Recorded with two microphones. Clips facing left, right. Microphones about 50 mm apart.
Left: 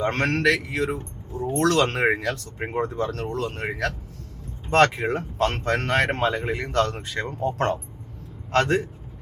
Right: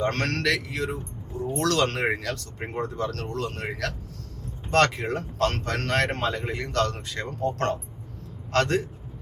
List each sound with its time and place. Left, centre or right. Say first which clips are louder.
0.0 s speech: left 4 dB; centre
0.9 s a man's voice: left 2 dB; left; by 8.9 s centre